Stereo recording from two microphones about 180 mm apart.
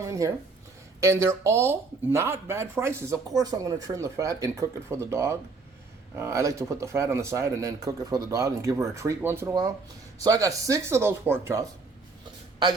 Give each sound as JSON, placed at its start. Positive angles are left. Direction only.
{"t": 0.0, "sound": "speech", "side_deg": -15}